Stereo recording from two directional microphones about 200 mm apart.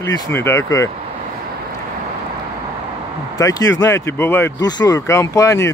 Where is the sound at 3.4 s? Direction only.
15° left (ahead or behind).